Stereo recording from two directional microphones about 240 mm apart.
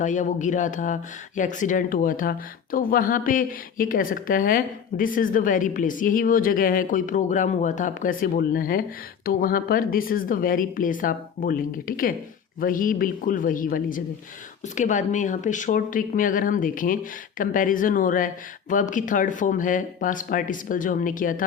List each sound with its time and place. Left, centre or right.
0.0 s speech: left